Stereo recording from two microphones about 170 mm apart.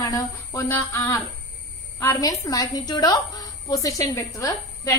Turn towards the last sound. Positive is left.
turn(degrees=20)  # may be behind; listen again after turning